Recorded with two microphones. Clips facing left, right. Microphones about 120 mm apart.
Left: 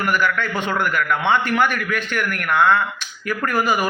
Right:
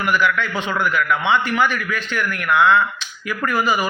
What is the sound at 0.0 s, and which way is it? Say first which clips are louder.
A man's voice: right 1 dB; 45° left (ahead or behind).